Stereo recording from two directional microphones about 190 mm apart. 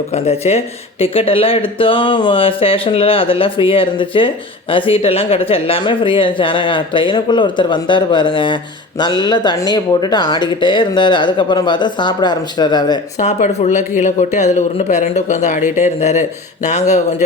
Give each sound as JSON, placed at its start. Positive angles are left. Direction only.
{"t": 0.1, "sound": "speech", "side_deg": 35}
{"t": 13.1, "sound": "speech", "side_deg": 40}